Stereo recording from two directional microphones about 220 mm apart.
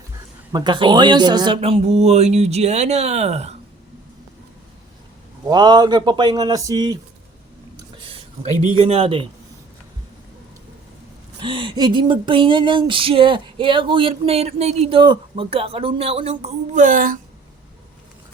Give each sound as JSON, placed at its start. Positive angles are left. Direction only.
{"t": 0.5, "sound": "speech", "side_deg": -20}
{"t": 5.5, "sound": "speech", "side_deg": -20}
{"t": 8.0, "sound": "speech", "side_deg": -30}
{"t": 11.3, "sound": "speech", "side_deg": -20}